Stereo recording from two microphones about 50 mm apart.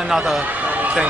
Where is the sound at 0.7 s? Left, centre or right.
Right.